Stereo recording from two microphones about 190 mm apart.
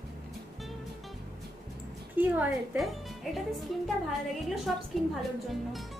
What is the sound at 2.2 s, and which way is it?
Speech, 10° right (ahead or behind).